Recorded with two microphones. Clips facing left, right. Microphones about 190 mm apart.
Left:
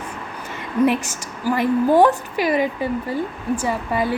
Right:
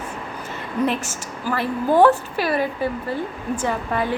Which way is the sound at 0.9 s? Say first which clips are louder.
Left 4 dB; 15° left (ahead or behind).